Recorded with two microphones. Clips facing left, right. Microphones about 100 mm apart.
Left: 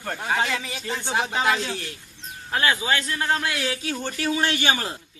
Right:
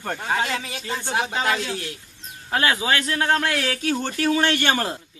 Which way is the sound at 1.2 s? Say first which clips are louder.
Even; centre (ahead or behind).